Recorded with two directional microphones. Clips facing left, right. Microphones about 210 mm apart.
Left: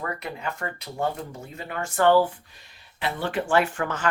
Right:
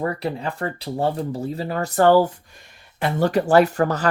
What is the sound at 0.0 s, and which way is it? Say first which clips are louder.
Speech: right 7 dB; 35° right (ahead or behind).